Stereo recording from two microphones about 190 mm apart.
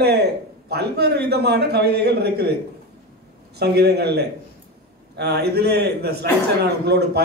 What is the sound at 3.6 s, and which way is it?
A man's voice, 60° right (ahead or behind).